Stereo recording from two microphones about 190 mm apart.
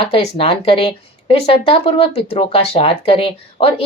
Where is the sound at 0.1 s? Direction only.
30° left (ahead or behind).